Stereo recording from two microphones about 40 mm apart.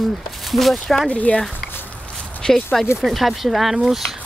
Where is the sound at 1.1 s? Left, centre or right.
Left.